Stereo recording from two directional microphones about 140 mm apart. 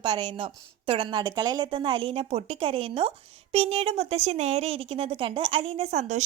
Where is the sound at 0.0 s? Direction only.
35° right (ahead or behind).